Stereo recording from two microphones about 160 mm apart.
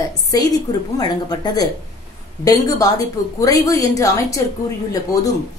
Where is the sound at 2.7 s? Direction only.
20° left (ahead or behind).